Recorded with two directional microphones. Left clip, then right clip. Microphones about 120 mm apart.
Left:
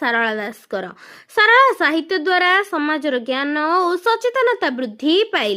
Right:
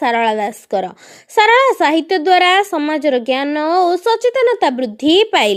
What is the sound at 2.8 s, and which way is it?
Speech, 20° right (ahead or behind).